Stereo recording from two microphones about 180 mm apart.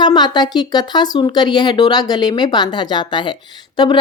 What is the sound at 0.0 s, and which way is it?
A woman's voice, 25° left (ahead or behind).